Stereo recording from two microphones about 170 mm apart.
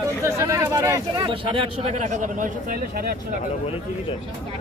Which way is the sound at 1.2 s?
30° right (ahead or behind).